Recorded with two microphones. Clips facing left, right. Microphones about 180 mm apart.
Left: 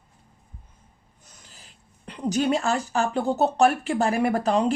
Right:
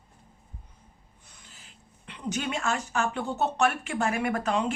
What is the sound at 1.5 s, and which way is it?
A woman's voice, 40° left (ahead or behind).